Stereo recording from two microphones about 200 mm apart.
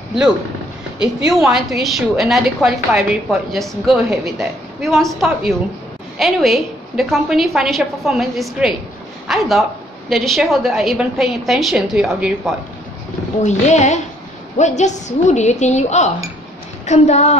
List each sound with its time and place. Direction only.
0.9 s a woman's voice: 5° right (ahead or behind)
13.4 s a woman's voice: 35° left (ahead or behind)